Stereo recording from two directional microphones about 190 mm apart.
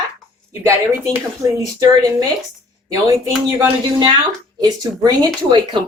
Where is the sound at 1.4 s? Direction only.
20° right (ahead or behind).